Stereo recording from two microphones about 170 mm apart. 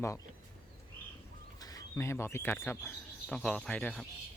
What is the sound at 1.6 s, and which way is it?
Speech, 20° left (ahead or behind).